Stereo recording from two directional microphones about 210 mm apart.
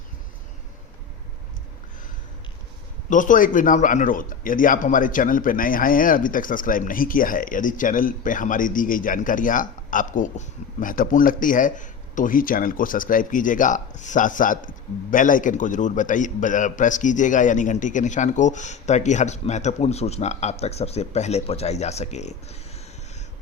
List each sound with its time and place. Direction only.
3.1 s a man's voice: 40° left (ahead or behind)